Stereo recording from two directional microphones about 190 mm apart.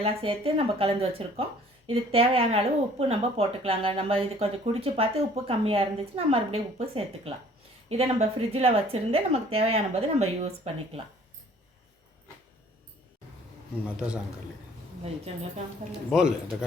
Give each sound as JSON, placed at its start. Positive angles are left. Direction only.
{"t": 0.0, "sound": "speech", "side_deg": -30}
{"t": 13.8, "sound": "a man's voice", "side_deg": -5}
{"t": 15.0, "sound": "speech", "side_deg": -35}
{"t": 16.0, "sound": "a man's voice", "side_deg": -5}